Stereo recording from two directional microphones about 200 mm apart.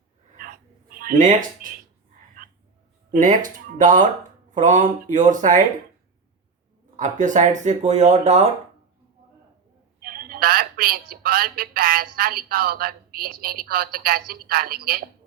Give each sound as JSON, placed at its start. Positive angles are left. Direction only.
{"t": 0.9, "sound": "speech", "side_deg": -45}
{"t": 2.4, "sound": "frog", "side_deg": -45}
{"t": 3.1, "sound": "speech", "side_deg": -40}
{"t": 6.9, "sound": "speech", "side_deg": -40}
{"t": 10.0, "sound": "speech", "side_deg": -45}